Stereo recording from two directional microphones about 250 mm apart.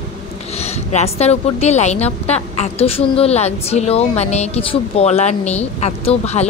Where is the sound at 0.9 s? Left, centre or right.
Left.